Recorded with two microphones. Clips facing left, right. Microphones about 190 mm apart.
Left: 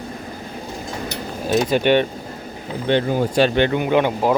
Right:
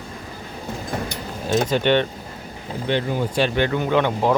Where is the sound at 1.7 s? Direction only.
10° left (ahead or behind).